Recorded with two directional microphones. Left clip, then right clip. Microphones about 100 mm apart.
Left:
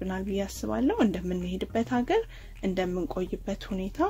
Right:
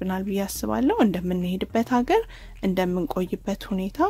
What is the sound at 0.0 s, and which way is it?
Speech, 45° right (ahead or behind).